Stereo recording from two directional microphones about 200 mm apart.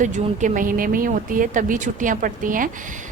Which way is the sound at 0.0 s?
35° right (ahead or behind).